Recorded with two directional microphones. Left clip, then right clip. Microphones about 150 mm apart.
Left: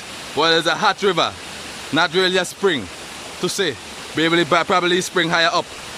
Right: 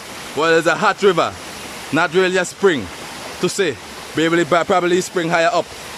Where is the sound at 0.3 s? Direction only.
5° right (ahead or behind).